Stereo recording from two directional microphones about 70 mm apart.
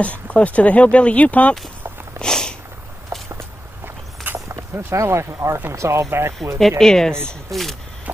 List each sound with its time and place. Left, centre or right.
0.0 s speech: centre
2.1 s a sound: centre
3.3 s walk: right
4.5 s speech: right
6.8 s speech: centre